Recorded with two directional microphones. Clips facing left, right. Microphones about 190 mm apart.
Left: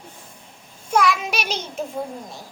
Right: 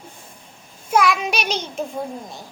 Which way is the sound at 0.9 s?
Centre (ahead or behind).